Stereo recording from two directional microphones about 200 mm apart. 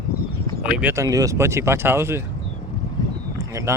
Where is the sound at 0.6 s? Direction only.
5° right (ahead or behind).